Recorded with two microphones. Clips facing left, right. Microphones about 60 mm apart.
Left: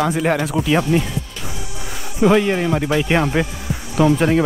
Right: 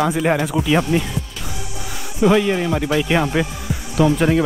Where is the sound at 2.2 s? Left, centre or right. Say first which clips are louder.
Left 1 dB; centre.